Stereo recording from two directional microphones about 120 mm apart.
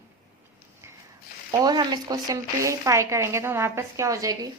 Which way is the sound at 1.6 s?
35° right (ahead or behind).